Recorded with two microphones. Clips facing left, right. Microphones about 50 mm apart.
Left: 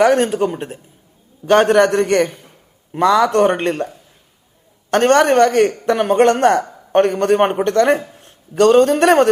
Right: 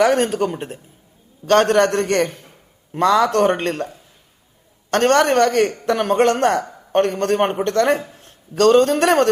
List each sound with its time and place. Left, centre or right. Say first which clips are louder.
0.0 s speech: left 3 dB; centre
1.5 s a man's voice: left 3 dB; centre